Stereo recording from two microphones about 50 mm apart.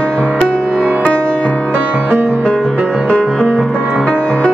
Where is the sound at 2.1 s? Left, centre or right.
Right.